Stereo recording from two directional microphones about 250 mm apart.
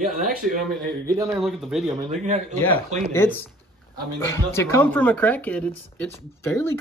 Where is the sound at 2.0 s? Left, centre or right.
Right.